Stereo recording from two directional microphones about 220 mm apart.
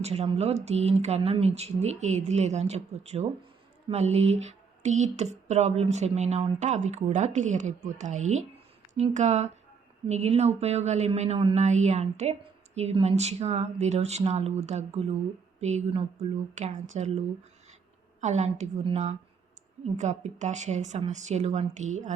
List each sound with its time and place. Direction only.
0.0 s a woman's voice: 30° right (ahead or behind)